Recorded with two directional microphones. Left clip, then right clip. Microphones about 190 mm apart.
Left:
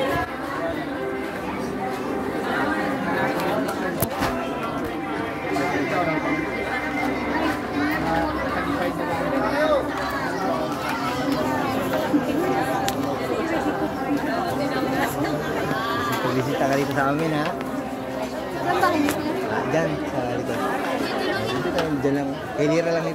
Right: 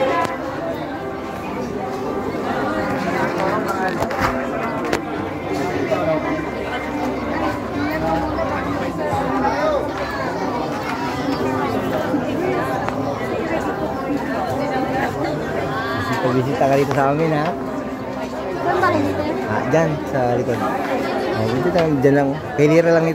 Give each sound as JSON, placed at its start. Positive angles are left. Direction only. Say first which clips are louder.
{"t": 22.0, "sound": "speech", "louder": "right 8 dB", "side_deg": -55}